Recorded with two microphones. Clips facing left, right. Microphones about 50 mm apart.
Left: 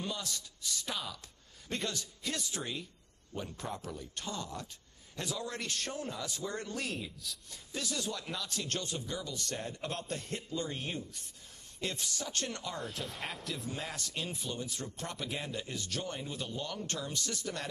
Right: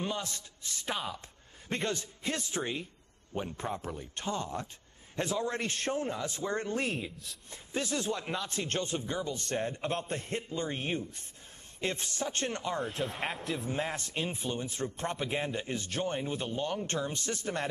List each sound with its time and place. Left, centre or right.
0.0 s speech: right
12.8 s speech: centre
13.7 s speech: right